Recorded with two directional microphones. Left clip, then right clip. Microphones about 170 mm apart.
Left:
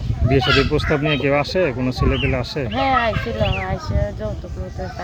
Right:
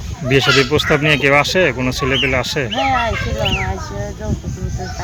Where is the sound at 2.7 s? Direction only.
25° left (ahead or behind).